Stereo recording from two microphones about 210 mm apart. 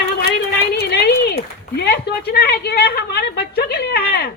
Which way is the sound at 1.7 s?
50° left (ahead or behind).